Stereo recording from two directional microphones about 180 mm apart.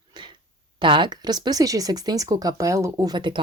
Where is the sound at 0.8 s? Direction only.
25° right (ahead or behind).